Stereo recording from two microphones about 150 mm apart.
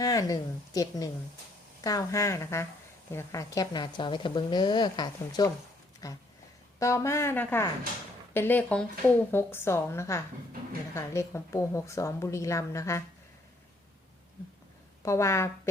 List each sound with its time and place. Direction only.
0.0 s speech: 25° left (ahead or behind)
15.0 s speech: 20° left (ahead or behind)